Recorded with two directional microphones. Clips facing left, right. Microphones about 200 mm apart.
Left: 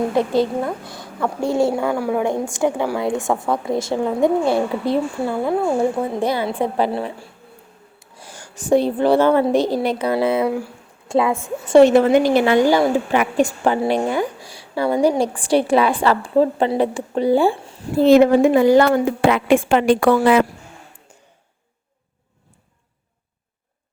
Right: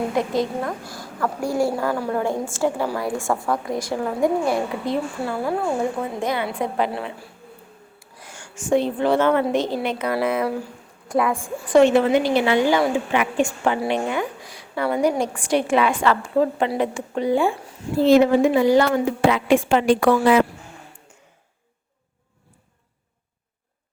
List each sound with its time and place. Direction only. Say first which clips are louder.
0.1 s a woman's voice: left 4 dB; 30° left (ahead or behind)
1.7 s a woman's voice: left 3 dB; 15° left (ahead or behind)
6.1 s a woman's voice: left 4 dB; 35° left (ahead or behind)
11.8 s a woman's voice: left 4 dB; 40° left (ahead or behind)
18.0 s a woman's voice: left 3 dB; 55° left (ahead or behind)